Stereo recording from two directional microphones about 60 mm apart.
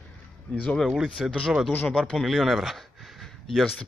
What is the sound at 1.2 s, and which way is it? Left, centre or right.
Speech, centre.